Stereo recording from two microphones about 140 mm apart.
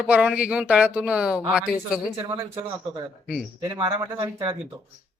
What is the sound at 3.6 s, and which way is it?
Speech, 25° right (ahead or behind).